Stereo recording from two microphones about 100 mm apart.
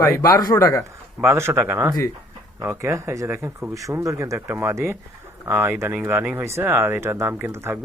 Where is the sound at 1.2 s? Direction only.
25° right (ahead or behind).